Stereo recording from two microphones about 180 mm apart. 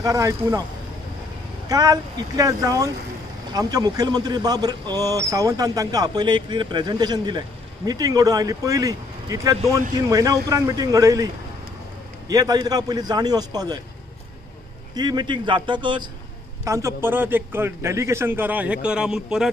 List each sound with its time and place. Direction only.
0.0 s a man's voice: 20° right (ahead or behind)
1.7 s a man's voice: 20° right (ahead or behind)
12.3 s a man's voice: 20° right (ahead or behind)
15.0 s a man's voice: 25° right (ahead or behind); by 19.5 s 5° right (ahead or behind)